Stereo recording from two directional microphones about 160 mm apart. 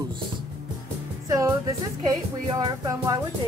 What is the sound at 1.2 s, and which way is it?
Speech, 20° right (ahead or behind).